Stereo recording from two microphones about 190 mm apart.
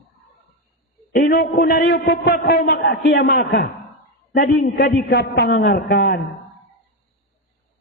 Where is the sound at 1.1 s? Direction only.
55° left (ahead or behind).